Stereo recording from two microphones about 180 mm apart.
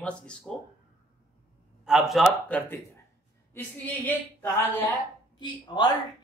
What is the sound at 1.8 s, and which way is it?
Speech, centre (ahead or behind).